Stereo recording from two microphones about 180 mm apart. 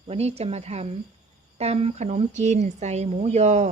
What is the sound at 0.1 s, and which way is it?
A woman's voice, 35° right (ahead or behind).